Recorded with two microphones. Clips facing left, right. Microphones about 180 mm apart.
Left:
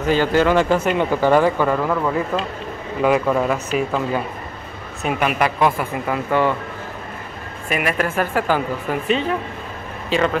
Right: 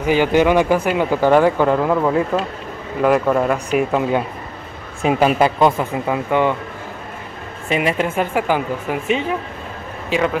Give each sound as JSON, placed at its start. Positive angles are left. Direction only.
{"t": 0.0, "sound": "speech", "side_deg": -15}
{"t": 3.0, "sound": "a man's voice", "side_deg": 0}
{"t": 3.5, "sound": "speech", "side_deg": -15}
{"t": 5.0, "sound": "speech", "side_deg": -90}
{"t": 5.7, "sound": "speech", "side_deg": -20}
{"t": 7.7, "sound": "a man's voice", "side_deg": -25}